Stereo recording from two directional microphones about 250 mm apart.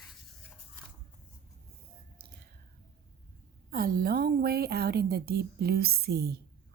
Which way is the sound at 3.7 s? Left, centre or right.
Right.